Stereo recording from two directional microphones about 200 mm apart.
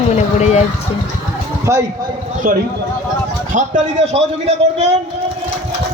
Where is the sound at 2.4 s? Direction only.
45° right (ahead or behind).